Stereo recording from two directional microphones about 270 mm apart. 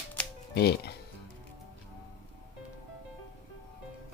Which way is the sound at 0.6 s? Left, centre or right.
Left.